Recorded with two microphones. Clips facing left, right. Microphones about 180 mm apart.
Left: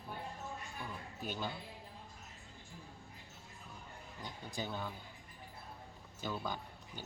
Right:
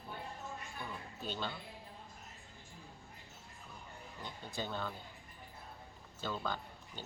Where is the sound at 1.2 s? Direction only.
10° left (ahead or behind).